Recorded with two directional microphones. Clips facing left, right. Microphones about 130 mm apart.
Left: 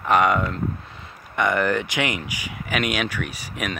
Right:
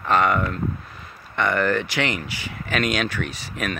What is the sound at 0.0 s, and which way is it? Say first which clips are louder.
Speech: left 1 dB; 15° left (ahead or behind).